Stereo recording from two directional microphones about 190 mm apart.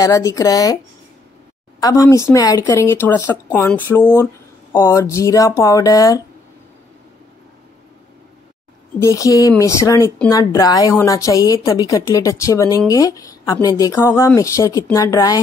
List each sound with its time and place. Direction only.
0.0 s a woman's voice: 15° left (ahead or behind)
1.8 s a woman's voice: 20° left (ahead or behind)
9.0 s a woman's voice: 15° left (ahead or behind)